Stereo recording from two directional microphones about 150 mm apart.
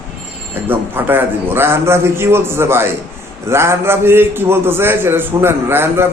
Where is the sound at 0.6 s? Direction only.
15° right (ahead or behind).